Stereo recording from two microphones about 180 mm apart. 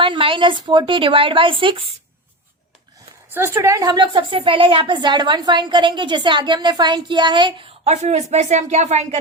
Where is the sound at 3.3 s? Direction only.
15° right (ahead or behind).